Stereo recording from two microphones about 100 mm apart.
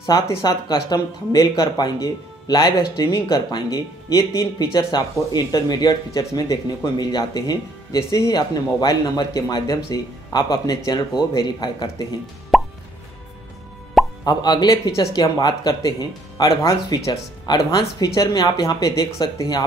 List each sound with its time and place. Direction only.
0.0 s speech: 40° left (ahead or behind)
4.9 s speech: 45° left (ahead or behind)
12.5 s plop: centre (ahead or behind)
14.2 s speech: 45° left (ahead or behind)